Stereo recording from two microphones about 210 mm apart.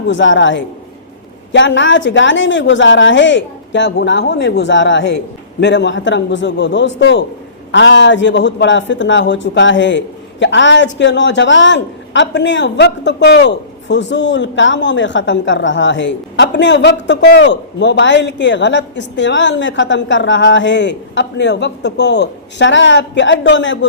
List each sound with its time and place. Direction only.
0.1 s a man's voice: 60° left (ahead or behind)